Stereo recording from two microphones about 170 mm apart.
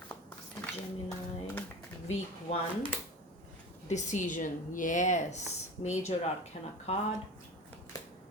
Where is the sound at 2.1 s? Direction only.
35° left (ahead or behind).